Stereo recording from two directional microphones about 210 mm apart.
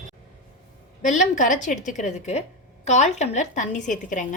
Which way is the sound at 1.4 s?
35° left (ahead or behind).